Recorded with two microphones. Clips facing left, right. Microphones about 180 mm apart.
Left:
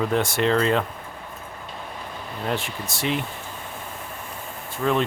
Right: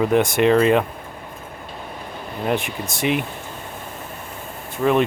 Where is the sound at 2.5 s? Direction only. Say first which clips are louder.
Right 5 dB; 15° right (ahead or behind).